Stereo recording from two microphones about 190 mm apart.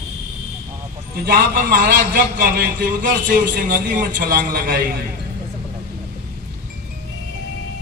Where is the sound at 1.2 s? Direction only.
45° right (ahead or behind).